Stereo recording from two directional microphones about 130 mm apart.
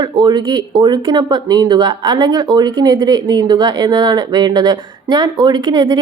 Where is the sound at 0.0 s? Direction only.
35° right (ahead or behind).